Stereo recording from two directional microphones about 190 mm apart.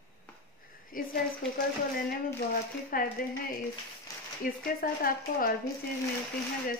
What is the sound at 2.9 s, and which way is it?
Speech, 50° left (ahead or behind).